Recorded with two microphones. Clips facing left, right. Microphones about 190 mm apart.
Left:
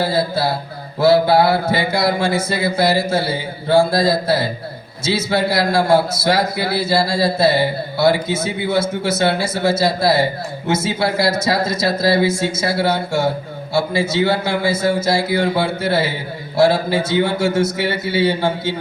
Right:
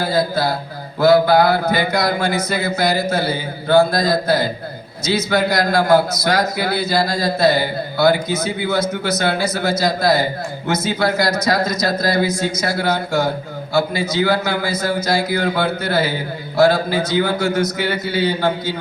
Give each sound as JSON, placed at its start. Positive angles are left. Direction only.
{"t": 0.0, "sound": "a man's voice", "side_deg": 30}